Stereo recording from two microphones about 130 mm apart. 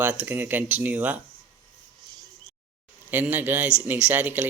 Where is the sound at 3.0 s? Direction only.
15° right (ahead or behind).